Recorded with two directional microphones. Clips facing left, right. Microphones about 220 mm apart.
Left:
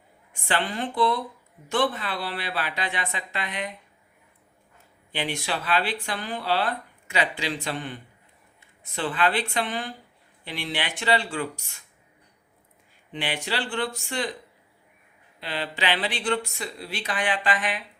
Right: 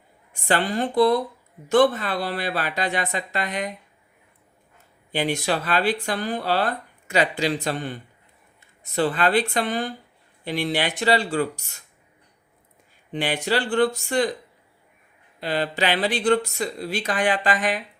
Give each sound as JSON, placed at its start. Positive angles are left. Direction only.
{"t": 0.4, "sound": "speech", "side_deg": -40}
{"t": 5.1, "sound": "speech", "side_deg": -40}
{"t": 13.1, "sound": "speech", "side_deg": -45}
{"t": 15.4, "sound": "speech", "side_deg": -45}